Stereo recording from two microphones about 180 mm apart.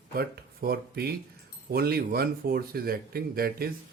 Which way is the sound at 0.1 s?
55° right (ahead or behind).